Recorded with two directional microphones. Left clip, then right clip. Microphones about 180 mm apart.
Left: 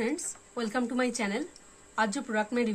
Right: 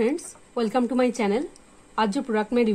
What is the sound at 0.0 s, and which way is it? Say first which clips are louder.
A woman's voice: right 7 dB; 45° right (ahead or behind).